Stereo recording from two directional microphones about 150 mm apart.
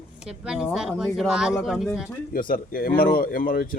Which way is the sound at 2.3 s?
70° left (ahead or behind).